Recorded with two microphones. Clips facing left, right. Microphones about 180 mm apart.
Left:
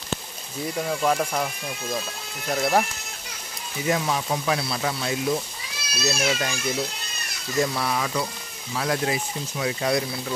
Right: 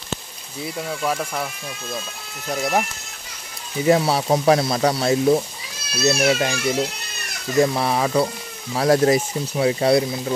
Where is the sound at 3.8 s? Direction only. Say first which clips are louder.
Right 7 dB; 35° right (ahead or behind).